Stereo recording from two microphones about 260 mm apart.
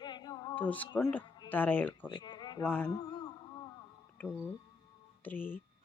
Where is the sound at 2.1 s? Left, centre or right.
Centre.